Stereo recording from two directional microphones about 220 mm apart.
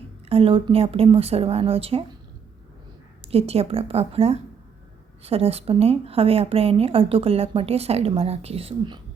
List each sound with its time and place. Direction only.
0.3 s speech: 25° right (ahead or behind)
3.2 s speech: 25° right (ahead or behind)